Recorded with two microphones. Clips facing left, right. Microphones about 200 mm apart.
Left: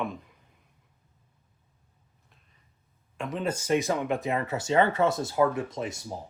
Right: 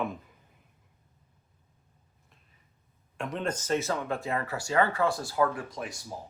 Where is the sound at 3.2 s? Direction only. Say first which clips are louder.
Left 2 dB; centre (ahead or behind).